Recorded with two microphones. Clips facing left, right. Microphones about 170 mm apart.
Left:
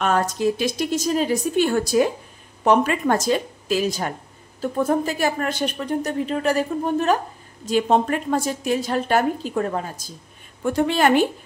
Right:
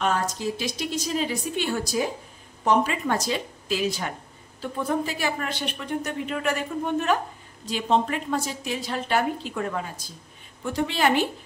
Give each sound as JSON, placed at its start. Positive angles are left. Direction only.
{"t": 0.0, "sound": "a woman's voice", "side_deg": 60}
{"t": 7.6, "sound": "a woman's voice", "side_deg": 45}